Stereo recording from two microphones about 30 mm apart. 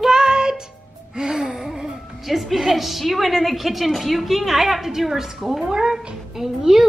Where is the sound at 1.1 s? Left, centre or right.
Right.